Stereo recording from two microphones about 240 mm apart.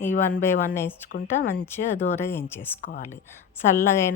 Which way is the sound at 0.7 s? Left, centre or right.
Centre.